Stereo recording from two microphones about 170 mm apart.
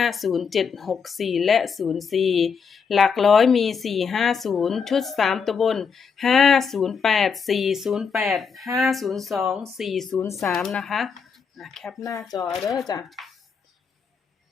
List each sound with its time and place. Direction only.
0.0 s speech: centre (ahead or behind)
11.9 s speech: 20° left (ahead or behind)
12.5 s speech: centre (ahead or behind)